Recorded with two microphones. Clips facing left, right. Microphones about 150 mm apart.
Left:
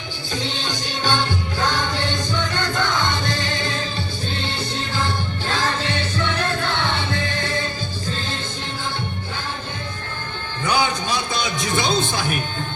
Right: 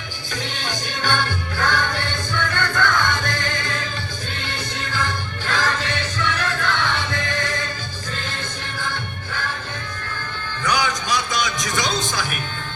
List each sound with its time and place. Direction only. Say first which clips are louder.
0.4 s music: even; 20° left (ahead or behind)
10.6 s music: left 2 dB; 30° left (ahead or behind)